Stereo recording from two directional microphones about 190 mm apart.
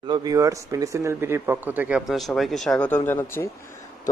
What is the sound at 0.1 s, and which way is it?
Speech, 20° right (ahead or behind).